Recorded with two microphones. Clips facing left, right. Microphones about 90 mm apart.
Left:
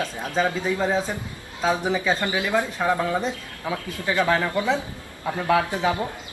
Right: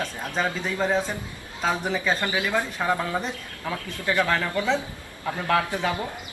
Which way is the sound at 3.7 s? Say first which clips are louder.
Left 1 dB; 20° left (ahead or behind).